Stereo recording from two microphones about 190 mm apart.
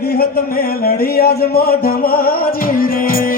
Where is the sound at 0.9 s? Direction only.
55° left (ahead or behind).